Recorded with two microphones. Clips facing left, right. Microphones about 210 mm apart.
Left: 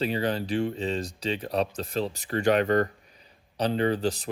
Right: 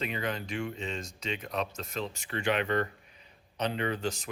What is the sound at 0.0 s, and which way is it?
Speech, 35° left (ahead or behind).